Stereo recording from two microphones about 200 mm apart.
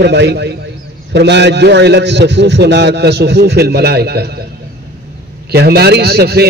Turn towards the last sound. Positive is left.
turn(degrees=-50)  # may be behind; listen again after turning